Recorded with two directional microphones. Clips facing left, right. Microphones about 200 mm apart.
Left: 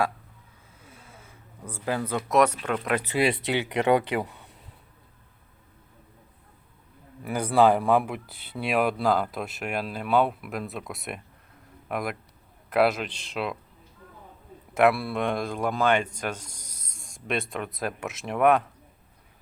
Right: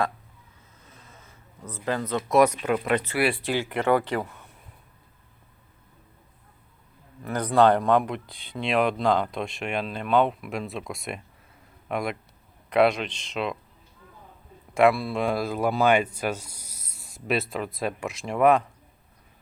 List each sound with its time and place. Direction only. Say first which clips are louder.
0.8 s a sound: left 2 dB; 10° left (ahead or behind)
2.1 s speech: right 2 dB; 5° right (ahead or behind)
2.9 s speech: left 3 dB; 15° left (ahead or behind)
7.2 s speech: right 1 dB; 10° left (ahead or behind)
14.7 s speech: right 1 dB; 5° left (ahead or behind)